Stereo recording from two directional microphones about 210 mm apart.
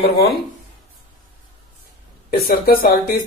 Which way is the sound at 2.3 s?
45° left (ahead or behind).